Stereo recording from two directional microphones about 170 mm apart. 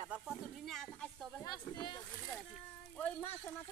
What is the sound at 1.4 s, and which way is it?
Speech, 25° left (ahead or behind).